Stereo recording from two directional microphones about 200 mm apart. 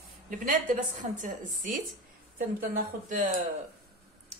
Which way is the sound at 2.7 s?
40° right (ahead or behind).